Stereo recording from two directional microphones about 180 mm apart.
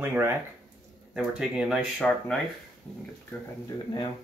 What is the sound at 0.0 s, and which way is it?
Speech, 10° right (ahead or behind).